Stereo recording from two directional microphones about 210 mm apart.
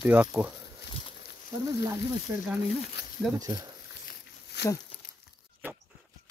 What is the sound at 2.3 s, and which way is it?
Speech, 10° right (ahead or behind).